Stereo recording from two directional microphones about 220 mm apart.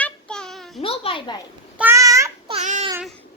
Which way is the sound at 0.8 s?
25° left (ahead or behind).